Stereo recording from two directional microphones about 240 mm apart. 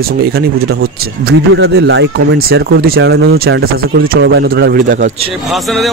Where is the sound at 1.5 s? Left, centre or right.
Right.